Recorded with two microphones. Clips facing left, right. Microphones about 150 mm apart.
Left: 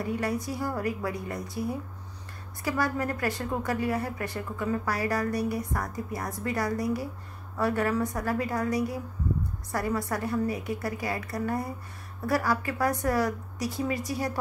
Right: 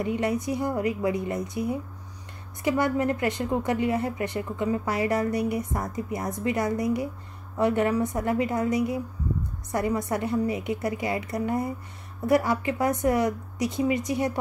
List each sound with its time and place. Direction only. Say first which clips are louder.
0.0 s a woman's voice: right 4 dB; 20° right (ahead or behind)